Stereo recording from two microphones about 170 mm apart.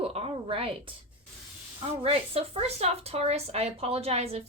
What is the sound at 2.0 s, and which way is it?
Speech, 35° right (ahead or behind).